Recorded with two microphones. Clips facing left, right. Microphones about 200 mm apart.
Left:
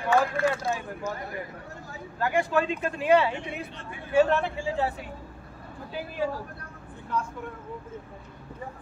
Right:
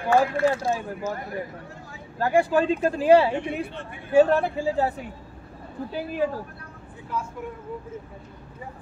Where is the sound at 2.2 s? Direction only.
35° right (ahead or behind).